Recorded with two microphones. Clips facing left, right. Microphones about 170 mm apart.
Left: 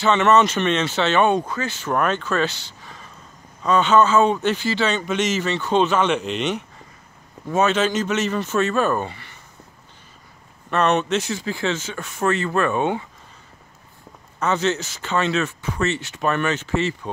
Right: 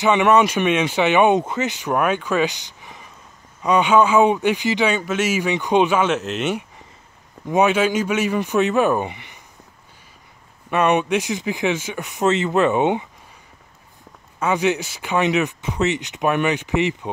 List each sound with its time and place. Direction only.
0.0 s speech: 15° right (ahead or behind)
10.7 s speech: 10° right (ahead or behind)
14.4 s speech: 10° right (ahead or behind)